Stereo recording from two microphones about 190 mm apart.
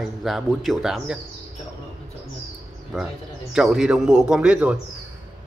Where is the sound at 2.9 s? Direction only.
5° right (ahead or behind).